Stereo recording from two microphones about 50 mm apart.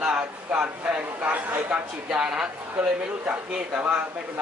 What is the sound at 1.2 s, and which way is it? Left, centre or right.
Speech, right.